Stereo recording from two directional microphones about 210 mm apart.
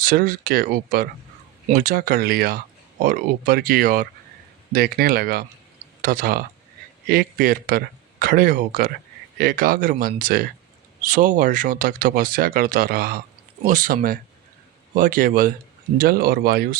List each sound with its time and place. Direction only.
0.0 s speech: 45° right (ahead or behind)